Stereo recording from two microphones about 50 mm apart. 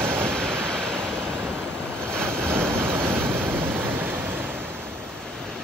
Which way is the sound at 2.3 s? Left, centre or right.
Right.